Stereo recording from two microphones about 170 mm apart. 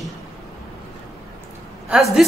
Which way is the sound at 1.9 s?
Centre (ahead or behind).